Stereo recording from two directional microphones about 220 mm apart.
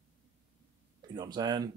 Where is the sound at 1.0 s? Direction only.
20° right (ahead or behind).